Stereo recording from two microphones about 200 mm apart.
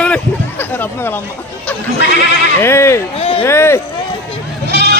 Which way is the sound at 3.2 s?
30° left (ahead or behind).